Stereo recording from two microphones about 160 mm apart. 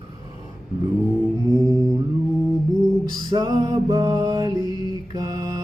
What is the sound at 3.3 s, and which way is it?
Music, 25° right (ahead or behind).